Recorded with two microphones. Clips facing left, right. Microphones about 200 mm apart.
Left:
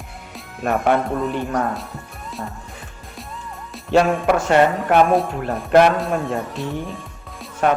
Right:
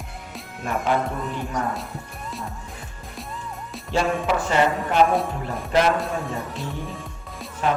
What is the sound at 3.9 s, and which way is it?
Music, 70° left (ahead or behind).